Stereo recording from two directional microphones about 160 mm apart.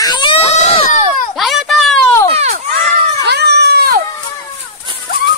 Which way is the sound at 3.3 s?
90° right.